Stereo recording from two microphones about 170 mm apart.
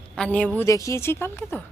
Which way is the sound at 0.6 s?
20° left (ahead or behind).